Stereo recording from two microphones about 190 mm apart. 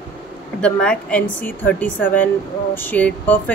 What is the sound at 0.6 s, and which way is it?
A woman's voice, 5° left (ahead or behind).